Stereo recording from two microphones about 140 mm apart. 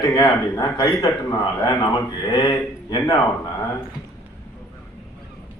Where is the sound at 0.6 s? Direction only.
25° left (ahead or behind).